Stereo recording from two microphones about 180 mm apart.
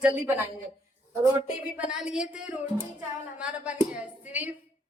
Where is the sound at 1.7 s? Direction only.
5° right (ahead or behind).